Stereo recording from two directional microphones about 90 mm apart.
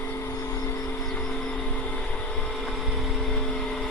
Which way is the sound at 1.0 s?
10° left (ahead or behind).